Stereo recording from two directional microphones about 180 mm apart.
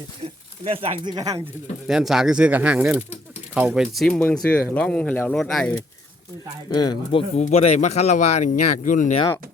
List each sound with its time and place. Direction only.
0.6 s speech: 35° right (ahead or behind)
1.1 s speech: 20° right (ahead or behind)
1.9 s speech: centre (ahead or behind)
6.7 s speech: 25° left (ahead or behind); by 9.1 s 45° left (ahead or behind)